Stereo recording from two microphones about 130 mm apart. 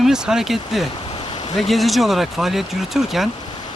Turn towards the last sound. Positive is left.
turn(degrees=0)  # may be behind; listen again after turning